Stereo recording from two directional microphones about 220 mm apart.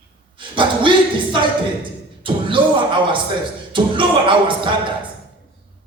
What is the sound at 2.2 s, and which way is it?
Beatboxing, 25° right (ahead or behind).